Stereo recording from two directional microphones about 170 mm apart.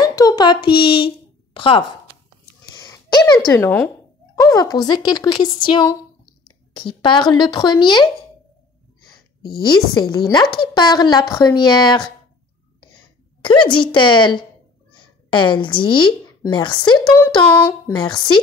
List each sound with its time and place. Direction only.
0.0 s a sound: 20° left (ahead or behind)
3.3 s a woman's voice: 10° left (ahead or behind)
10.1 s a woman's voice: 25° left (ahead or behind)
13.4 s a woman's voice: 30° left (ahead or behind)
17.5 s speech: 10° left (ahead or behind)
17.9 s a woman's voice: 25° left (ahead or behind)